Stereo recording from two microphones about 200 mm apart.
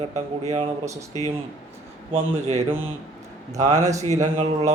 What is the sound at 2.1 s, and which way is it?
Speech, 30° right (ahead or behind).